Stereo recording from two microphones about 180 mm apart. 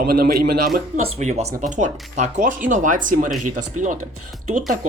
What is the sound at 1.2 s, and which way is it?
Speech, 40° right (ahead or behind).